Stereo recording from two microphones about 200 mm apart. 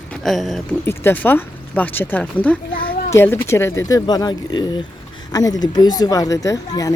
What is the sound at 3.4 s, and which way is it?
Speech, 15° left (ahead or behind).